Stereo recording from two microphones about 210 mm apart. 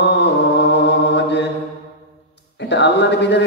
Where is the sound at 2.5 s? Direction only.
55° left (ahead or behind).